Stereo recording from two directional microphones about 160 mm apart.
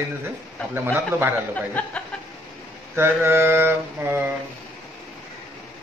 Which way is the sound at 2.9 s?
15° right (ahead or behind).